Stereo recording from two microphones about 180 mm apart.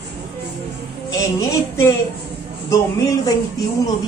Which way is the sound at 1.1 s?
15° left (ahead or behind).